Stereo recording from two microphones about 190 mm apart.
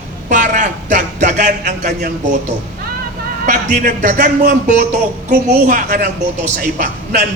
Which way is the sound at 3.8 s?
45° right (ahead or behind).